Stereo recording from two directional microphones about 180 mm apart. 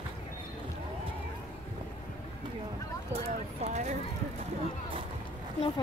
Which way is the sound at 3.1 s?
35° right (ahead or behind).